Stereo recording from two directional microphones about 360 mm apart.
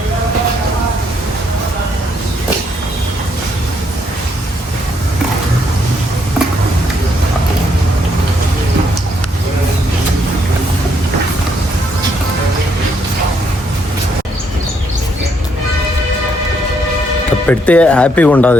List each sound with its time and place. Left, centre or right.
17.5 s speech: centre